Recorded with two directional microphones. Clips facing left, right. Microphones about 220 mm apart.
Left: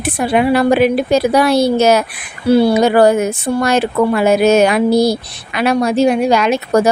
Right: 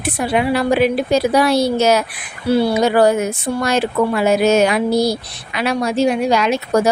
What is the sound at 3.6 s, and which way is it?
A woman's voice, 55° left (ahead or behind).